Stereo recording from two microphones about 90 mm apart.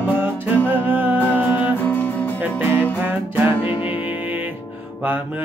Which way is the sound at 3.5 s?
85° left.